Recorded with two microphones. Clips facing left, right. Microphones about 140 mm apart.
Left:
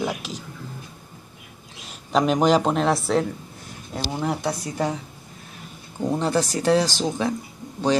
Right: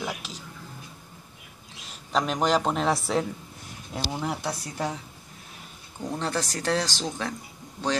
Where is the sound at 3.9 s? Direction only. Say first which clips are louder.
Left 4 dB; centre (ahead or behind).